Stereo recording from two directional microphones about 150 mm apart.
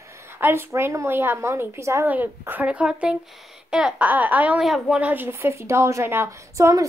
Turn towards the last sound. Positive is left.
turn(degrees=-20)  # may be behind; listen again after turning